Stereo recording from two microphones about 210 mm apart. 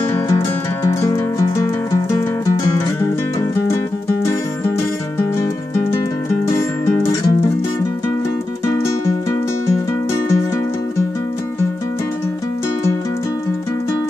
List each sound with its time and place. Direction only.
7.0 s music: 15° left (ahead or behind)